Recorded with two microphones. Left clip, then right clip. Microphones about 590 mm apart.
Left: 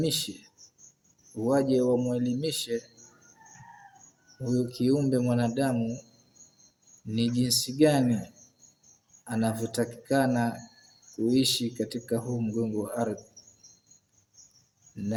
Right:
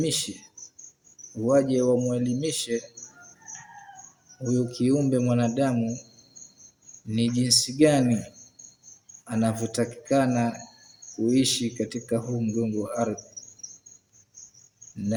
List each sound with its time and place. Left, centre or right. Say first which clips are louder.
0.0 s speech: right 2 dB; left
1.5 s speech: right 3 dB; left
4.4 s speech: right 2 dB; left
7.1 s speech: right 4 dB; left
9.2 s speech: right 3 dB; left